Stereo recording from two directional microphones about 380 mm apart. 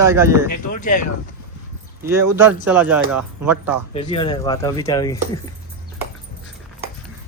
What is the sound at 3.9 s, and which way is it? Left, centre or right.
Speech, centre.